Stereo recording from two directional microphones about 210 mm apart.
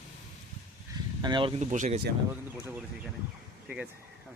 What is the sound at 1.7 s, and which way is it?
Speech, 35° right (ahead or behind).